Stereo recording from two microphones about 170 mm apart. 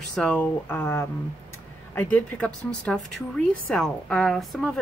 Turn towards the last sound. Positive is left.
turn(degrees=5)  # may be behind; listen again after turning